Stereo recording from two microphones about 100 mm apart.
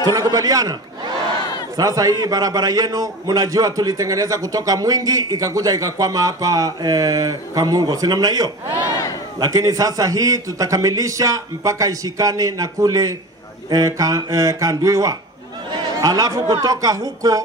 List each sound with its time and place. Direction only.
0.0 s a man's voice: 35° right (ahead or behind)